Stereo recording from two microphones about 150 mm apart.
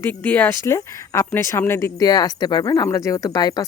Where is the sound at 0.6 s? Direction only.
20° left (ahead or behind).